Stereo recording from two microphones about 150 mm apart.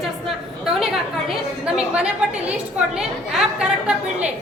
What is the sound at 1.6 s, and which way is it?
A woman's voice, 5° right (ahead or behind).